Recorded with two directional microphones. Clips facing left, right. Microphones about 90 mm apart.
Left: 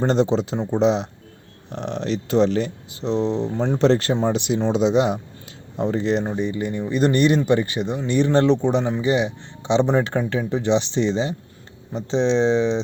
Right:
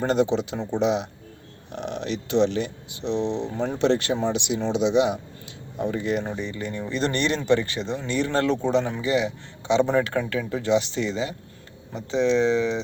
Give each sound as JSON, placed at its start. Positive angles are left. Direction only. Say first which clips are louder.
{"t": 0.0, "sound": "speech", "louder": "left 3 dB", "side_deg": 30}
{"t": 5.7, "sound": "speech", "louder": "left 4 dB", "side_deg": 30}